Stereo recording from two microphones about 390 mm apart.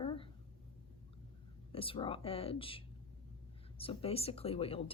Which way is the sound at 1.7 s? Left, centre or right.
Centre.